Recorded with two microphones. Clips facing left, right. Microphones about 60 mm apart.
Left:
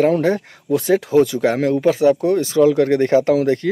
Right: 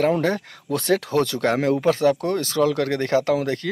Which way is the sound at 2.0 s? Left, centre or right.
Centre.